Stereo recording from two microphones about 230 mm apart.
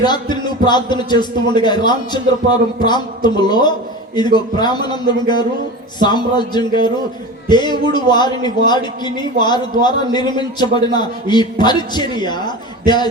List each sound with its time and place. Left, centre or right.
0.0 s speech: centre